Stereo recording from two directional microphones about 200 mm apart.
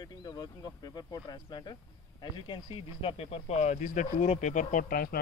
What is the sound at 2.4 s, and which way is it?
Speech, 25° left (ahead or behind).